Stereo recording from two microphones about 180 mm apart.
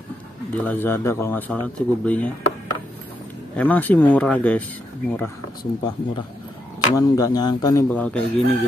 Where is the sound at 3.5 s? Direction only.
10° left (ahead or behind).